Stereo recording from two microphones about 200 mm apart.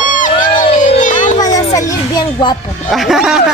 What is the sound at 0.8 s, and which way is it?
Children playing, 40° left (ahead or behind).